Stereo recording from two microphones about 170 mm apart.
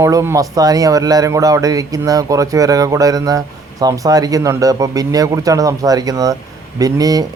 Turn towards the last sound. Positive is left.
turn(degrees=-20)  # may be behind; listen again after turning